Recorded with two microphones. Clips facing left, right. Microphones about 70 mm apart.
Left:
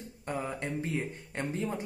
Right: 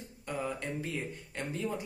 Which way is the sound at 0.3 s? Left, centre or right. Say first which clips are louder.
Left 1 dB; left.